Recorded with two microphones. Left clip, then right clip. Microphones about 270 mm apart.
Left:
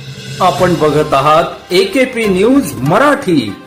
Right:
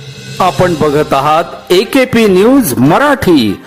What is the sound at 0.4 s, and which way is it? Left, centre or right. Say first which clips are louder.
Music: even; right.